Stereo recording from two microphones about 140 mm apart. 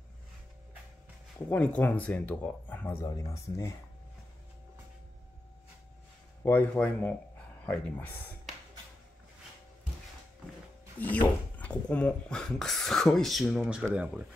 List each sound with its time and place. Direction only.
1.5 s speech: 10° left (ahead or behind)
6.4 s speech: 10° left (ahead or behind)
11.0 s speech: 10° left (ahead or behind); by 14.2 s 10° right (ahead or behind)